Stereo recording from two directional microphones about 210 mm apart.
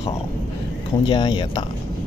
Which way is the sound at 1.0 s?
25° left (ahead or behind).